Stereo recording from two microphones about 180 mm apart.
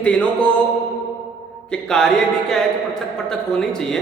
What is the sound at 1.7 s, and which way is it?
A man's voice, 5° left (ahead or behind).